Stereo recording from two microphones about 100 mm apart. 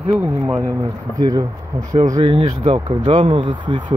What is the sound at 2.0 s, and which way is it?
Speech, 70° right (ahead or behind).